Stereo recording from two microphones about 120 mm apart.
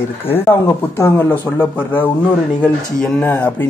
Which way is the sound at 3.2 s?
15° left (ahead or behind).